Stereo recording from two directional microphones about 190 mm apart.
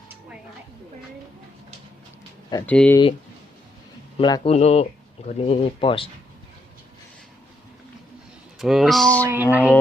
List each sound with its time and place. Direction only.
2.6 s speech: 5° left (ahead or behind)
4.2 s speech: 30° left (ahead or behind)
8.5 s speech: centre (ahead or behind)
9.2 s music: 10° right (ahead or behind)